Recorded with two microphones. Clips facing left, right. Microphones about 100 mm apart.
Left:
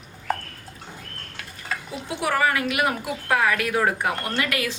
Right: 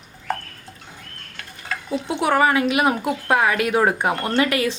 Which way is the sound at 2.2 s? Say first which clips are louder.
Right 4 dB; 25° right (ahead or behind).